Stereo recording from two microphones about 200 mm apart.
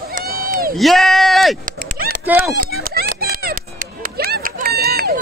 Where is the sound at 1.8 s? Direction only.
45° right (ahead or behind).